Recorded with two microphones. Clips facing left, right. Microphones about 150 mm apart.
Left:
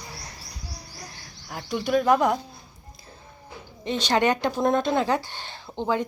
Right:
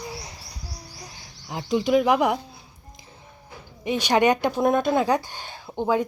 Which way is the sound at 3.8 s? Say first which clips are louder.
Right 2 dB; 10° right (ahead or behind).